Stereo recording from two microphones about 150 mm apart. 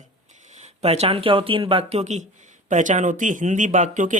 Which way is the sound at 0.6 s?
45° right (ahead or behind).